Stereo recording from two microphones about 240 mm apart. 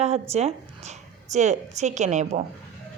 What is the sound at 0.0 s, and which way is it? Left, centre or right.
A woman's voice, right.